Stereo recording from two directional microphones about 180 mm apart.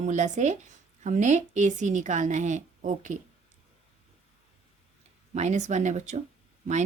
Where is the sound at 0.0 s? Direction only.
40° right (ahead or behind).